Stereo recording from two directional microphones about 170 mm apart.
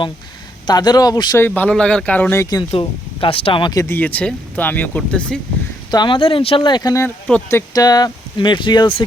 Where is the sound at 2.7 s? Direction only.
35° left (ahead or behind).